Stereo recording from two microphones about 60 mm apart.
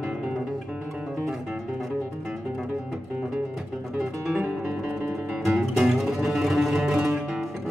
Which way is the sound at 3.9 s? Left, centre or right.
Centre.